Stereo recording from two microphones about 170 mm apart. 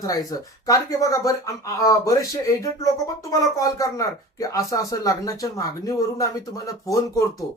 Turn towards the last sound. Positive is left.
turn(degrees=20)  # may be behind; listen again after turning